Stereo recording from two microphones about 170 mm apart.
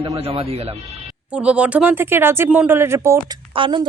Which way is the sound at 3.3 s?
30° right (ahead or behind).